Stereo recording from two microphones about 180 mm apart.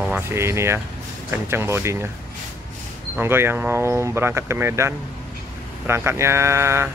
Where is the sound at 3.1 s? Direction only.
15° right (ahead or behind).